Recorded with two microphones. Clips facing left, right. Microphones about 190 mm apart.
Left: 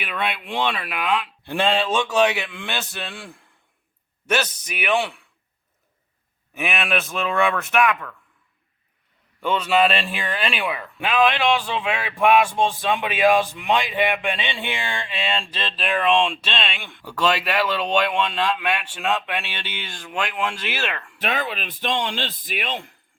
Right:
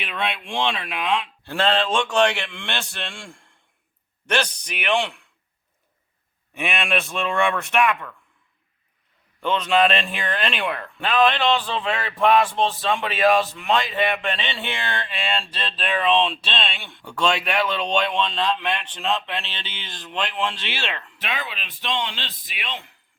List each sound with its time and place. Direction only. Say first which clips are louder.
0.0 s speech: left 1 dB; 5° left (ahead or behind)
6.5 s speech: even; 5° left (ahead or behind)
9.4 s speech: even; 10° left (ahead or behind)
21.2 s speech: left 8 dB; 45° left (ahead or behind)